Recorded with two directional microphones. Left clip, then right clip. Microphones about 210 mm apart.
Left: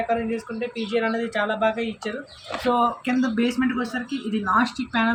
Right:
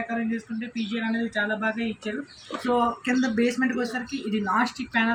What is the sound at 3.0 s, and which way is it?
A woman's voice, 15° left (ahead or behind).